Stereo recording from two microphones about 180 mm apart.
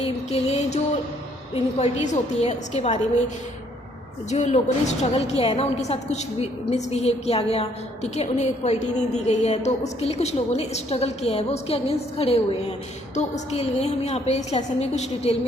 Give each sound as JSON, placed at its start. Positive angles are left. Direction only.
{"t": 0.0, "sound": "a woman's voice", "side_deg": 35}
{"t": 2.0, "sound": "a woman's voice", "side_deg": 40}
{"t": 4.3, "sound": "a woman's voice", "side_deg": 40}